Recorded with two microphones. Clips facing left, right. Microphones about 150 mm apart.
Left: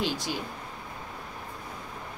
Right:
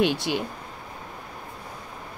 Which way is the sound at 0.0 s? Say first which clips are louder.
Right 7 dB; 65° right (ahead or behind).